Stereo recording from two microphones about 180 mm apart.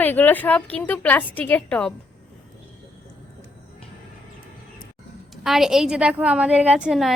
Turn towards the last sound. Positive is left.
turn(degrees=0)  # may be behind; listen again after turning